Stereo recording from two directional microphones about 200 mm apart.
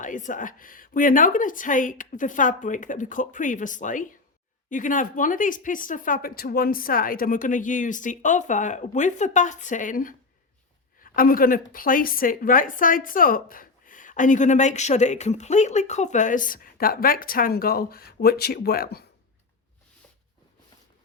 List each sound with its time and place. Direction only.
0.0 s a woman's voice: 40° left (ahead or behind)